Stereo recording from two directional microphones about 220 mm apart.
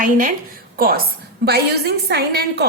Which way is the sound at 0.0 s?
35° right (ahead or behind).